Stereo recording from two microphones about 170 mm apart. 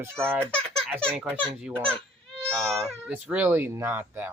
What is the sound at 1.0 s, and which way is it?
Speech, 5° left (ahead or behind).